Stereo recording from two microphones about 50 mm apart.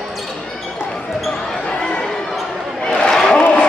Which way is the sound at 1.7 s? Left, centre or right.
Centre.